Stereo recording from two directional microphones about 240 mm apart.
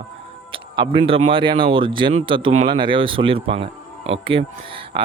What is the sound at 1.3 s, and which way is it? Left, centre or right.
Speech, right.